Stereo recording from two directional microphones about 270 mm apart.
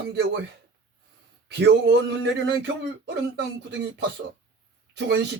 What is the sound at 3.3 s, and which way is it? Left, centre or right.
Speech, right.